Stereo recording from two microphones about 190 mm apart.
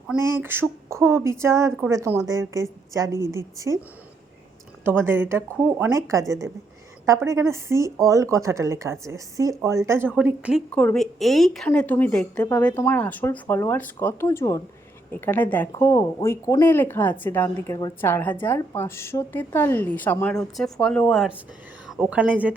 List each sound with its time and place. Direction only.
0.1 s speech: 10° right (ahead or behind)
4.9 s speech: 10° right (ahead or behind)